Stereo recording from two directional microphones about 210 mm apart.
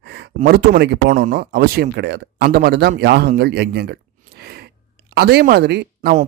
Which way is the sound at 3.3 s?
50° right (ahead or behind).